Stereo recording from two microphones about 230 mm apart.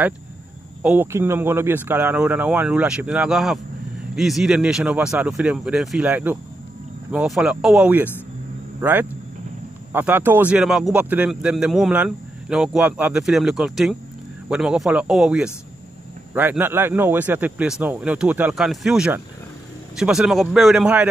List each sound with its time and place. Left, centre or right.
0.8 s speech: centre
9.9 s speech: centre